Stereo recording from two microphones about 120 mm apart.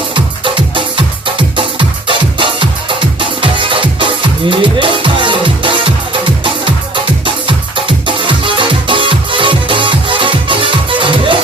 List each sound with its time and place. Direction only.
0.1 s music: 45° right (ahead or behind)